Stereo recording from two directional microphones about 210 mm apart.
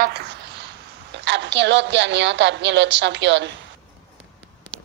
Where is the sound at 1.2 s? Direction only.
55° right (ahead or behind).